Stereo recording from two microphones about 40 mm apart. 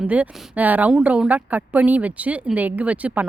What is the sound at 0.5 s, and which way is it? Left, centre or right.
Speech, right.